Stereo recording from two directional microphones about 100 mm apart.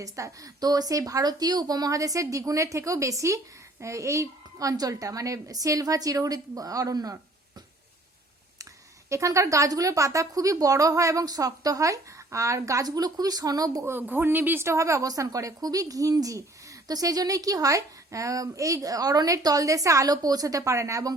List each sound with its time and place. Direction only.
0.0 s a woman's voice: 35° right (ahead or behind)
9.0 s a woman's voice: 30° right (ahead or behind)
13.8 s a woman's voice: 20° right (ahead or behind)